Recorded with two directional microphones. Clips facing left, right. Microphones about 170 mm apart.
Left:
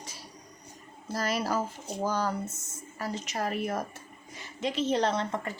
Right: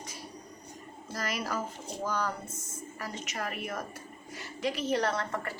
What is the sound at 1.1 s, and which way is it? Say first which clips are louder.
A woman's voice: left 5 dB; 30° left (ahead or behind).